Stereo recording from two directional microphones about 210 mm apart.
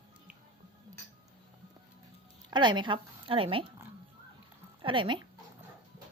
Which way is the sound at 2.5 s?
20° right (ahead or behind).